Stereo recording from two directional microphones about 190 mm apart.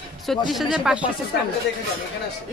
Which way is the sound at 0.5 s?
Centre (ahead or behind).